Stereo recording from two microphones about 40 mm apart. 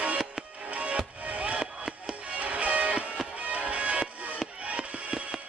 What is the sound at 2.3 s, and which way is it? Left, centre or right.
Music, right.